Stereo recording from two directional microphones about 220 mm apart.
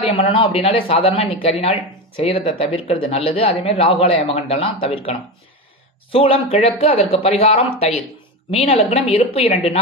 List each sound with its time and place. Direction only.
0.0 s speech: 25° left (ahead or behind)
6.1 s speech: 25° left (ahead or behind)